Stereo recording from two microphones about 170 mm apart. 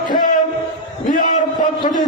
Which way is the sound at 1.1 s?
55° left (ahead or behind).